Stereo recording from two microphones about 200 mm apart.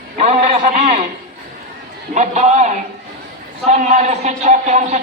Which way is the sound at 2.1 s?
35° right (ahead or behind).